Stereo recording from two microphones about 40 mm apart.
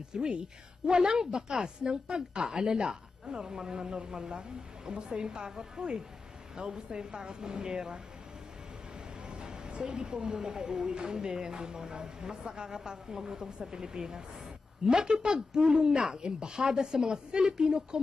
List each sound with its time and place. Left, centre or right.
0.1 s a woman's voice: right
9.3 s music: centre
10.2 s a woman's voice: centre